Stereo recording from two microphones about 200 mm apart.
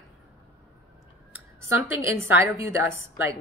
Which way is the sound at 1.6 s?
15° right (ahead or behind).